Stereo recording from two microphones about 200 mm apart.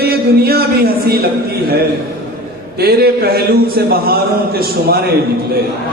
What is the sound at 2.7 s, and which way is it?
A man's voice, 50° right (ahead or behind).